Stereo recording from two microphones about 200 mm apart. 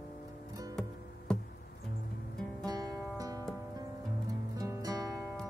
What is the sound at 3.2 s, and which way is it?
Music, 15° right (ahead or behind).